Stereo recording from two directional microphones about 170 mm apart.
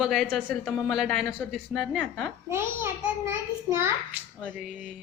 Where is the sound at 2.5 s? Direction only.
15° right (ahead or behind).